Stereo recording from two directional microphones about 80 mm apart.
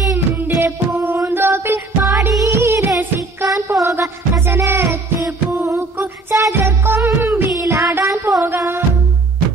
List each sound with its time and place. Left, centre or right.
0.1 s music: right
7.2 s child singing: right
7.5 s music: right